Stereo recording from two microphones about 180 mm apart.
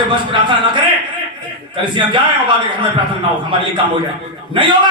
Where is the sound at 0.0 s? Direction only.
25° right (ahead or behind).